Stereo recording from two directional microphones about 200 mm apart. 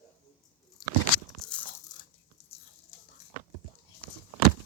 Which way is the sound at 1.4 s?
Centre (ahead or behind).